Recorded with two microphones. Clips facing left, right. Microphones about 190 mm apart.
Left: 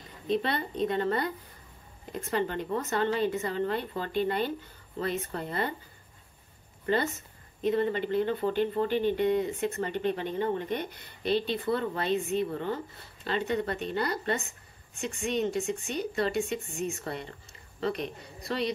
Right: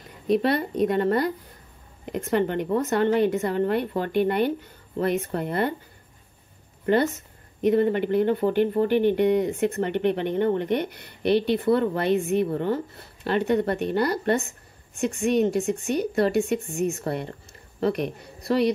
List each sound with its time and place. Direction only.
0.4 s a woman's voice: 65° right (ahead or behind)
7.6 s speech: 60° right (ahead or behind)
16.3 s a woman's voice: 55° right (ahead or behind)